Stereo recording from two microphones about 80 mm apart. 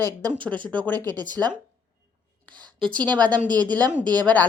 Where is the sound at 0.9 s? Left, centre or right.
Right.